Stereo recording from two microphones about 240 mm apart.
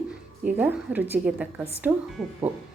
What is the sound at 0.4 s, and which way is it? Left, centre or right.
A woman's voice, centre.